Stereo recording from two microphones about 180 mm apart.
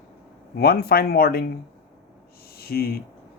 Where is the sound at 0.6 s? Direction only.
60° left (ahead or behind).